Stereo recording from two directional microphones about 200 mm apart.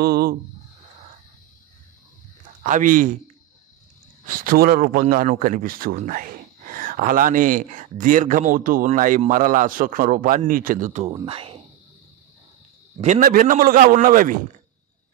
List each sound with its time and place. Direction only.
0.0 s speech: 50° right (ahead or behind)
2.6 s speech: 40° right (ahead or behind)
4.3 s speech: 45° right (ahead or behind); by 11.6 s 30° right (ahead or behind)
13.0 s speech: 40° right (ahead or behind)